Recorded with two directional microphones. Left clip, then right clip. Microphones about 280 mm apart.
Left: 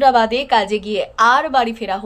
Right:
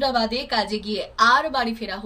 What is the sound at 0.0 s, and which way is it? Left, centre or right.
A woman's voice, centre.